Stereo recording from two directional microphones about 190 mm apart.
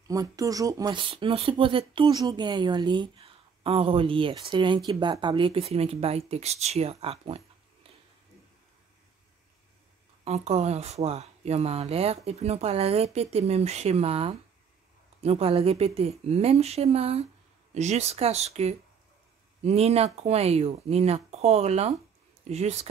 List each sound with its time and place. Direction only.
0.1 s speech: 20° right (ahead or behind)
10.2 s speech: 35° right (ahead or behind)